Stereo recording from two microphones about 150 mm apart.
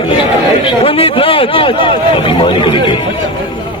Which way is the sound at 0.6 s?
40° left (ahead or behind).